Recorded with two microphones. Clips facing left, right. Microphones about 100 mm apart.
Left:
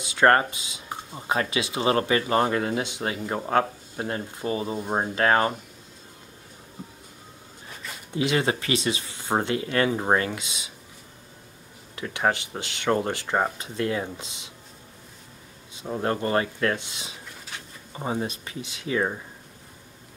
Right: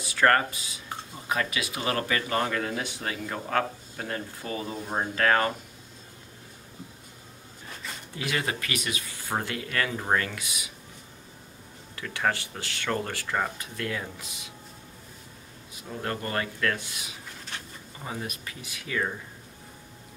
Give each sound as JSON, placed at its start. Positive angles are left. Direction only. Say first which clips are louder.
{"t": 0.0, "sound": "speech", "louder": "left 3 dB", "side_deg": 20}
{"t": 8.1, "sound": "speech", "louder": "left 7 dB", "side_deg": 25}
{"t": 11.9, "sound": "speech", "louder": "left 3 dB", "side_deg": 20}
{"t": 15.7, "sound": "speech", "louder": "left 6 dB", "side_deg": 25}
{"t": 17.5, "sound": "a sound", "louder": "right 1 dB", "side_deg": 0}
{"t": 17.9, "sound": "speech", "louder": "left 8 dB", "side_deg": 25}